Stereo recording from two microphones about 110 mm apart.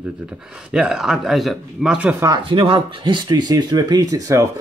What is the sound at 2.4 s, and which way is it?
Speech, 55° right (ahead or behind).